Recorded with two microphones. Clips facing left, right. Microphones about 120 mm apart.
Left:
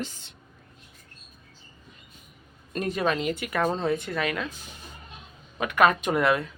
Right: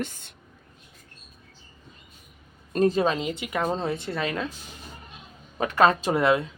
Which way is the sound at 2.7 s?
30° right (ahead or behind).